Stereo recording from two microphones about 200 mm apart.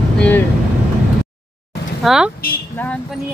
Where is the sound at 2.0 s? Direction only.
Centre (ahead or behind).